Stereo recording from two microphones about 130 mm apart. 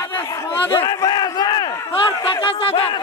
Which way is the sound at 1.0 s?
35° left (ahead or behind).